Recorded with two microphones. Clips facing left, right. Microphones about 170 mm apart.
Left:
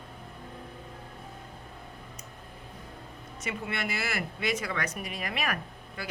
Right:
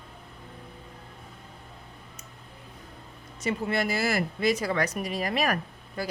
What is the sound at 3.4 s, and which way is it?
Speech, 35° right (ahead or behind).